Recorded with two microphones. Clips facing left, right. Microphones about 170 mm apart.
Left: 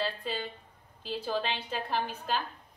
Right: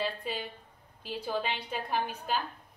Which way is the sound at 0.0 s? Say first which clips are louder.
Left 1 dB; 15° right (ahead or behind).